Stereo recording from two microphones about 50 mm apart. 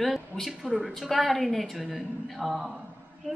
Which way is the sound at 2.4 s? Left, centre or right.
Centre.